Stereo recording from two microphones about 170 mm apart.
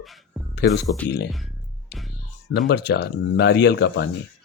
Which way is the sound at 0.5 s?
75° left (ahead or behind).